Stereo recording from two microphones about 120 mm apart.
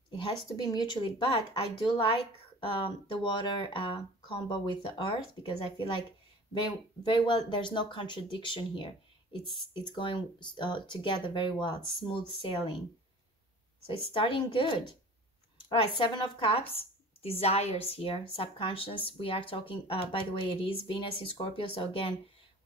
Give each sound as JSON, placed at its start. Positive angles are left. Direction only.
{"t": 0.1, "sound": "a sound", "side_deg": 45}
{"t": 0.7, "sound": "speech", "side_deg": 40}
{"t": 1.5, "sound": "speech", "side_deg": 50}
{"t": 7.1, "sound": "speech", "side_deg": 45}
{"t": 13.8, "sound": "speech", "side_deg": 45}
{"t": 15.7, "sound": "speech", "side_deg": 50}